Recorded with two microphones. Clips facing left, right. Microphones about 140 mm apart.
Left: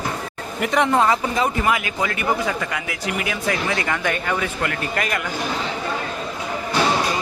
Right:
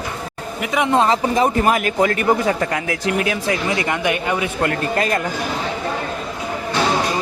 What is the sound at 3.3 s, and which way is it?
Speech, 25° right (ahead or behind).